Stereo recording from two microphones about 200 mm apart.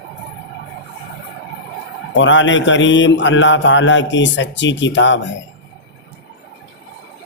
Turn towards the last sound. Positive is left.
turn(degrees=65)  # may be behind; listen again after turning